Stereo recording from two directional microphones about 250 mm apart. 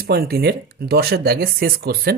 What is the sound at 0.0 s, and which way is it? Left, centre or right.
Speech, right.